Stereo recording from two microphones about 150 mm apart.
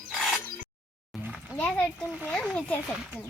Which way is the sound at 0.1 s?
Centre (ahead or behind).